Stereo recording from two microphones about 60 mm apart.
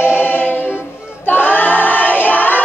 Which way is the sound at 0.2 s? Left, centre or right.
Left.